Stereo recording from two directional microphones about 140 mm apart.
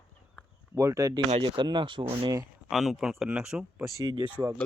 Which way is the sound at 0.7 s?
20° right (ahead or behind).